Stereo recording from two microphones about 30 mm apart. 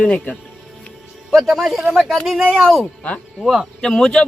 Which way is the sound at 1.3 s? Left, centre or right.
Centre.